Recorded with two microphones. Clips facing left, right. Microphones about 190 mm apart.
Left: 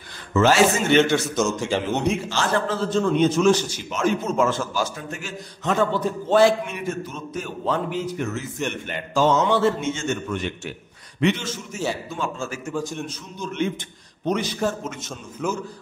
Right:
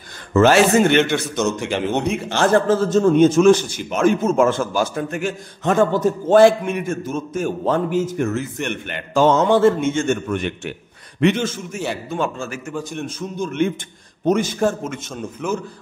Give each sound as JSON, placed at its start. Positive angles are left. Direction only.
{"t": 0.3, "sound": "a man's voice", "side_deg": -55}
{"t": 1.1, "sound": "a man's voice", "side_deg": 0}
{"t": 1.6, "sound": "a man's voice", "side_deg": -60}
{"t": 12.9, "sound": "a man's voice", "side_deg": -50}